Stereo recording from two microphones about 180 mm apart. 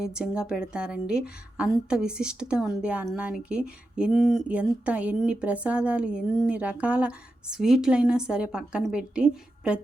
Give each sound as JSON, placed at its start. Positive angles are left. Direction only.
{"t": 0.0, "sound": "a woman's voice", "side_deg": -5}